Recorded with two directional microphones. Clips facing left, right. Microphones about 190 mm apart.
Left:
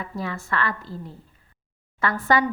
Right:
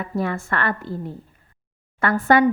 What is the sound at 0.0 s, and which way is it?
A woman's voice, 55° right (ahead or behind).